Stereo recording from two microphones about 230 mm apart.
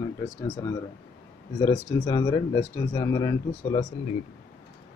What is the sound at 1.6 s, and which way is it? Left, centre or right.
Speech, centre.